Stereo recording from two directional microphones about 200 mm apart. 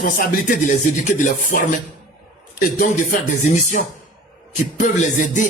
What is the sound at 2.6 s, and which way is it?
Speech, 40° left (ahead or behind).